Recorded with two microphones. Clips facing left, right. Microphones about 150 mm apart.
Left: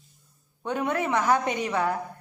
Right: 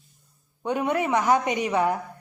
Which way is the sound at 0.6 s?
15° right (ahead or behind).